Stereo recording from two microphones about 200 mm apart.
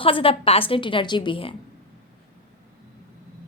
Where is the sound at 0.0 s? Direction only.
25° left (ahead or behind).